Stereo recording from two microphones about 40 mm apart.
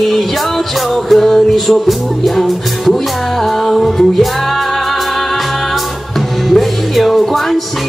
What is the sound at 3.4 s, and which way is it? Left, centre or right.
Music, centre.